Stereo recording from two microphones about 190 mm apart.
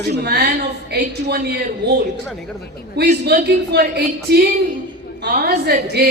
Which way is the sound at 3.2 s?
60° right (ahead or behind).